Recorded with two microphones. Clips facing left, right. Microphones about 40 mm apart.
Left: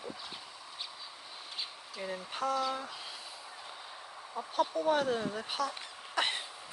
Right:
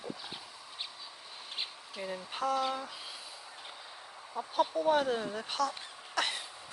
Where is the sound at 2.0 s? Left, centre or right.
Centre.